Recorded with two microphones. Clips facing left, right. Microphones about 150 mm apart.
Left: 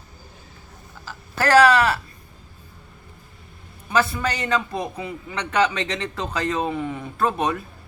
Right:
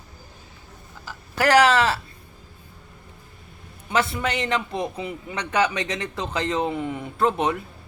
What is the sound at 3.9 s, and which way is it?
A man's voice, 20° right (ahead or behind).